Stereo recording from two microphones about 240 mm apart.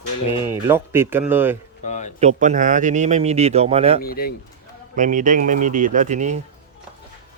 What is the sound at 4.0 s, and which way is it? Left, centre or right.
Speech, left.